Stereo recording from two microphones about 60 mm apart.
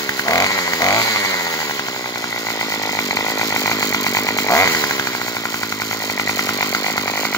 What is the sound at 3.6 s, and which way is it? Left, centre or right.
Chainsaw, left.